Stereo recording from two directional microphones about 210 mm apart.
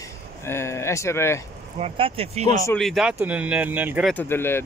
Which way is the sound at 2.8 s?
Centre (ahead or behind).